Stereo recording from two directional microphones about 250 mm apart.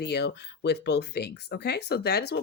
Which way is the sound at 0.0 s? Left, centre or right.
Left.